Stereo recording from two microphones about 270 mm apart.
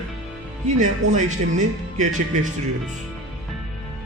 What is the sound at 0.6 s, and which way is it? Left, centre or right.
A man's voice, right.